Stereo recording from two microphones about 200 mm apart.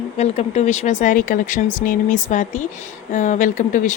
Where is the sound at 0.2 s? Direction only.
35° left (ahead or behind).